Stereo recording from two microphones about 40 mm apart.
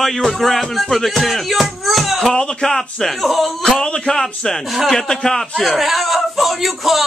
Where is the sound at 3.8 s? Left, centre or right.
Centre.